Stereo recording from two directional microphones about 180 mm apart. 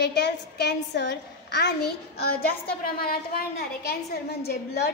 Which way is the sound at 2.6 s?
55° left (ahead or behind).